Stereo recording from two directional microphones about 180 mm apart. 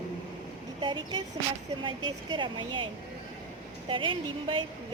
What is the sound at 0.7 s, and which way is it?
Speech, 25° right (ahead or behind).